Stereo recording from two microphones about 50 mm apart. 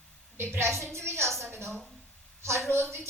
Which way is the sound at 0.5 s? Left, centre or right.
Right.